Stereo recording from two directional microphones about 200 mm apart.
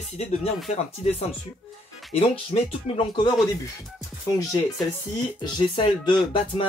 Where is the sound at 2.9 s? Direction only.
25° left (ahead or behind).